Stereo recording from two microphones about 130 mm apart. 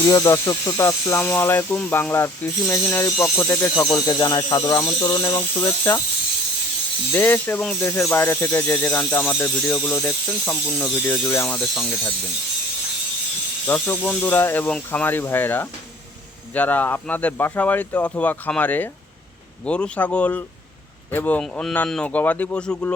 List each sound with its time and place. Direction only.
0.0 s speech: 25° left (ahead or behind)
3.9 s speech: 30° left (ahead or behind)
7.1 s speech: 15° left (ahead or behind)
13.7 s speech: 15° left (ahead or behind)